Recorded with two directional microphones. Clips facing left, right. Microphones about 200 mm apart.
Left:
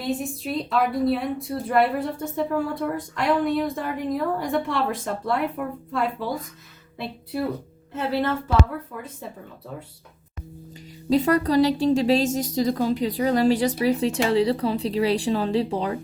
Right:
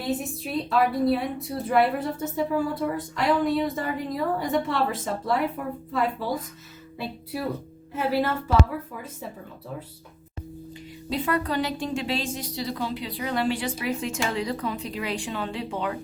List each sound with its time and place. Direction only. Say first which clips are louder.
0.0 s a woman's voice: left 2 dB; centre (ahead or behind)
11.1 s a woman's voice: left 7 dB; 40° left (ahead or behind)